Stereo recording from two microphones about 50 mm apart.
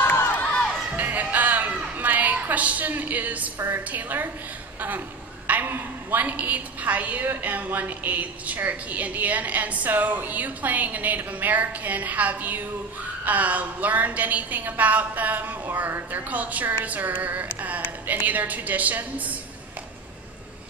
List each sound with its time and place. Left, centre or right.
0.0 s crowd: left
0.9 s music: right
3.5 s a woman's voice: right
3.9 s a woman's voice: right
5.5 s a woman's voice: right